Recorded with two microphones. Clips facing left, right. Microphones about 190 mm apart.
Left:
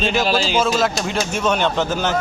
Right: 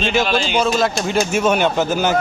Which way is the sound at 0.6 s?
Centre (ahead or behind).